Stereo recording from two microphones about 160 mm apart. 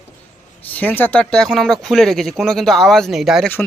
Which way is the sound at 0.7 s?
10° left (ahead or behind).